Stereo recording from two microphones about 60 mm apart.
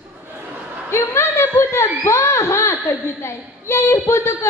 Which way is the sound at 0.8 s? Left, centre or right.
Left.